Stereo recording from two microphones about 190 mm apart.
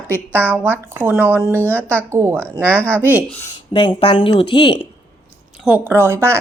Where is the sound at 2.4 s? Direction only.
5° left (ahead or behind).